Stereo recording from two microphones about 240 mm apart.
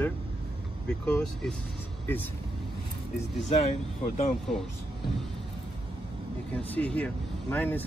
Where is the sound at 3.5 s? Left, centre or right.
Left.